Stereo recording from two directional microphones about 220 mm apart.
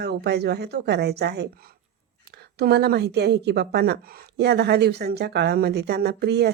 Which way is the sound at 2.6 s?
45° right (ahead or behind).